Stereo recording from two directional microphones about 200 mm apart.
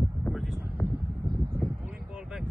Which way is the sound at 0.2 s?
Centre (ahead or behind).